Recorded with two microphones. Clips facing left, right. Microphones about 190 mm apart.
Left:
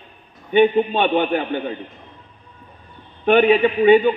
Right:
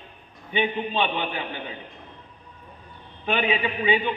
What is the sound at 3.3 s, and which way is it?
Speech, 50° left (ahead or behind).